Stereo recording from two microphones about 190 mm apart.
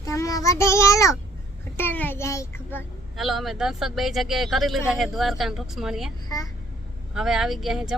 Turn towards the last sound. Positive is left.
turn(degrees=0)  # may be behind; listen again after turning